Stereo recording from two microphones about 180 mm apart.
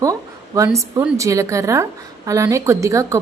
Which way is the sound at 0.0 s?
20° right (ahead or behind).